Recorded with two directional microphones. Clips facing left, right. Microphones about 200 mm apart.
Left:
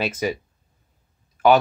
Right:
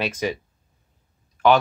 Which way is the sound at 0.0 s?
5° left (ahead or behind).